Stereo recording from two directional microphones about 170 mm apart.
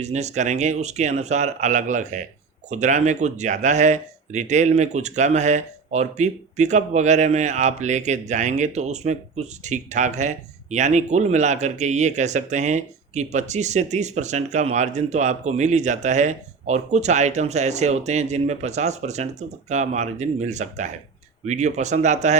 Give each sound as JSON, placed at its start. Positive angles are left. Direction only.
{"t": 0.0, "sound": "speech", "side_deg": -40}